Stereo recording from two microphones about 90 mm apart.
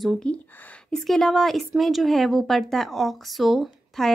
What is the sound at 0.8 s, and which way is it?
A woman's voice, 5° left (ahead or behind).